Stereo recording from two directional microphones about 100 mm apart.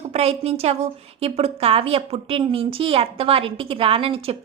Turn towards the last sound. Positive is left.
turn(degrees=-70)  # may be behind; listen again after turning